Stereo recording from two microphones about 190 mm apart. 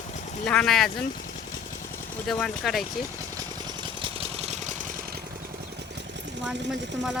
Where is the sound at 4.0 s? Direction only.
35° right (ahead or behind).